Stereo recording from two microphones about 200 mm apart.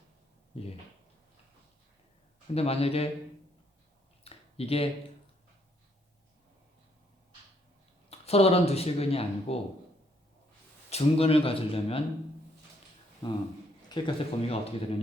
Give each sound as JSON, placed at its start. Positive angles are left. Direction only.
{"t": 0.5, "sound": "speech", "side_deg": 30}
{"t": 2.6, "sound": "speech", "side_deg": 30}
{"t": 4.2, "sound": "a sound", "side_deg": 30}
{"t": 8.1, "sound": "speech", "side_deg": 30}
{"t": 10.8, "sound": "speech", "side_deg": 30}
{"t": 13.2, "sound": "speech", "side_deg": 20}